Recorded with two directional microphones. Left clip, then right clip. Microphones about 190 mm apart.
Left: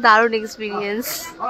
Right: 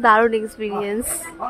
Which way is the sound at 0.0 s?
20° right (ahead or behind).